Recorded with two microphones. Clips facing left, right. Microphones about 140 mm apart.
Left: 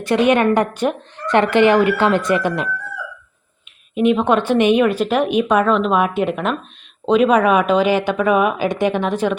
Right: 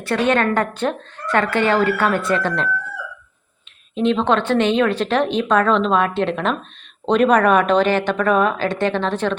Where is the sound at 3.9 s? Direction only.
10° left (ahead or behind).